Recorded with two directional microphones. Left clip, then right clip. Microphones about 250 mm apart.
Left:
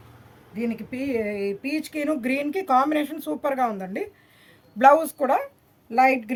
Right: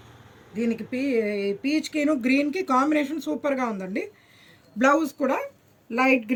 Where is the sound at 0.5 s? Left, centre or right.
Left.